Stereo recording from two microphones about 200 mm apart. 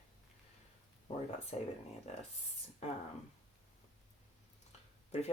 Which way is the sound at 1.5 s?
35° left (ahead or behind).